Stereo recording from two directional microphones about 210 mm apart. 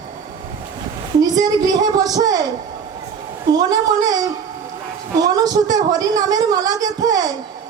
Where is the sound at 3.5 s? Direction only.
20° right (ahead or behind).